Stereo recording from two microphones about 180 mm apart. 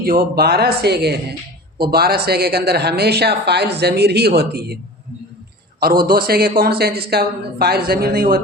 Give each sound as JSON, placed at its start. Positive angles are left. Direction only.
{"t": 0.0, "sound": "speech", "side_deg": -55}
{"t": 5.8, "sound": "speech", "side_deg": -55}